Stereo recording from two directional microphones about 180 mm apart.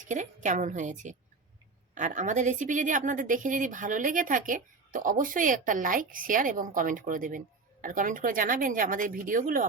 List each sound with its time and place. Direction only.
0.0 s a woman's voice: 45° right (ahead or behind)